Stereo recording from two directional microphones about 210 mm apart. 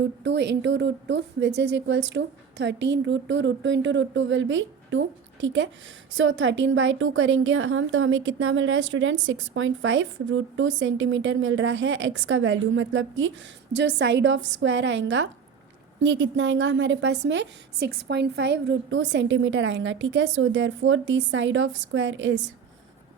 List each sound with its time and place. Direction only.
0.0 s a woman's voice: 55° right (ahead or behind)